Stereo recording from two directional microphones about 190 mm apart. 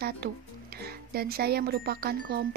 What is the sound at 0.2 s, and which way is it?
Speech, 60° right (ahead or behind).